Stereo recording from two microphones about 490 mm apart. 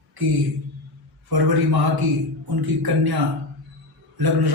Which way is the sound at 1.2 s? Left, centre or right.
Right.